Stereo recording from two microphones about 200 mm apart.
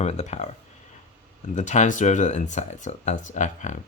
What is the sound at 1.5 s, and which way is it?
Speech, 35° left (ahead or behind).